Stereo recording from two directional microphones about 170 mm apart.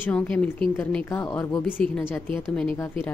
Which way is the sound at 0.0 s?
10° left (ahead or behind).